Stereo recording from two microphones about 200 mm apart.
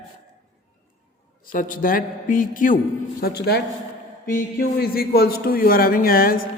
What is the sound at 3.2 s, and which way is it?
A man's voice, 55° left (ahead or behind).